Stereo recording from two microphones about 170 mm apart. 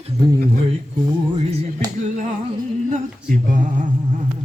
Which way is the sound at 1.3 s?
35° right (ahead or behind).